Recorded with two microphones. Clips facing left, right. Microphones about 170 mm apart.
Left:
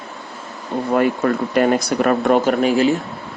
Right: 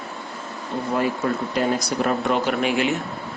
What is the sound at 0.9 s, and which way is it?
Speech, 60° left (ahead or behind).